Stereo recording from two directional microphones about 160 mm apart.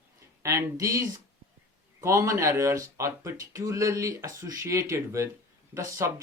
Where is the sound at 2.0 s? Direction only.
20° right (ahead or behind).